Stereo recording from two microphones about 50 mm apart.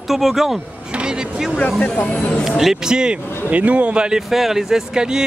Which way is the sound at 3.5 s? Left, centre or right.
Right.